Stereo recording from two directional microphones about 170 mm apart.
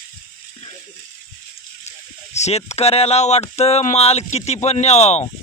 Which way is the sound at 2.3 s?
40° left (ahead or behind).